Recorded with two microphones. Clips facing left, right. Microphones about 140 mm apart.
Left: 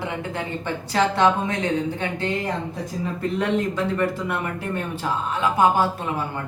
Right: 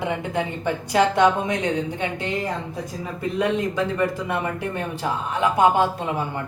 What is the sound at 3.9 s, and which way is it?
Speech, 15° right (ahead or behind).